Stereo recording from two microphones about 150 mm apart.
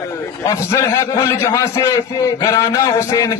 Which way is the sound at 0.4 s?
20° left (ahead or behind).